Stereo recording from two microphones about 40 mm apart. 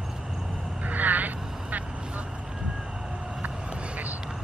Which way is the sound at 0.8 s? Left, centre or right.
Right.